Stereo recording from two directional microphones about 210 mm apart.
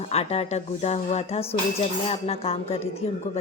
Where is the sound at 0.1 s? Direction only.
30° left (ahead or behind).